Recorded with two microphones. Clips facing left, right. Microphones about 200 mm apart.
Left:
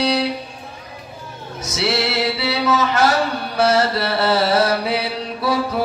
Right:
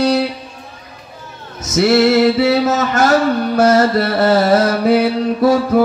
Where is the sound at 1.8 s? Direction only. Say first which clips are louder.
Right 10 dB; 45° right (ahead or behind).